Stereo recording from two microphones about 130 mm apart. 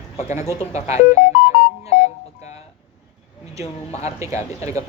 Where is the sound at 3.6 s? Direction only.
55° left (ahead or behind).